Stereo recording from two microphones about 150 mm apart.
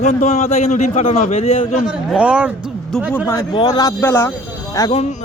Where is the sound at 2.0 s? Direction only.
10° right (ahead or behind).